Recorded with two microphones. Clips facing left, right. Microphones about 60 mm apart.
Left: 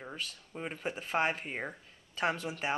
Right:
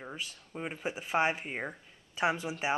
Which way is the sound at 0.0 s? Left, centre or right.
Centre.